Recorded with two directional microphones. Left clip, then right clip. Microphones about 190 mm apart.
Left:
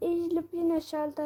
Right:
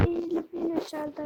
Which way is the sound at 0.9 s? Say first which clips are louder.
Left 3 dB; 15° right (ahead or behind).